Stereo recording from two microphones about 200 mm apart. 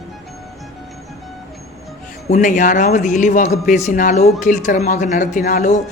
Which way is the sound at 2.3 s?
40° left (ahead or behind).